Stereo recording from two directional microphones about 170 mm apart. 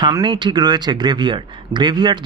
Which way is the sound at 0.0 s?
25° right (ahead or behind).